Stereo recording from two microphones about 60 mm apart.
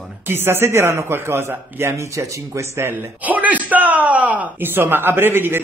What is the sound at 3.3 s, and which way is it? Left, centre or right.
Speech, right.